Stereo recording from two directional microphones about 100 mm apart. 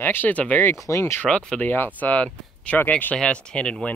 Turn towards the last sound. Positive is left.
turn(degrees=10)  # may be behind; listen again after turning